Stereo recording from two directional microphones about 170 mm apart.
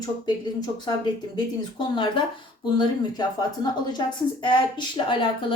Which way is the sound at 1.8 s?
30° left (ahead or behind).